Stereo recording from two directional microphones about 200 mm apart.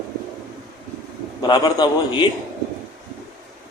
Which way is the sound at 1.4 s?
20° left (ahead or behind).